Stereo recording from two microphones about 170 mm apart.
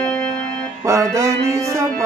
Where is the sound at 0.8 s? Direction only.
15° right (ahead or behind).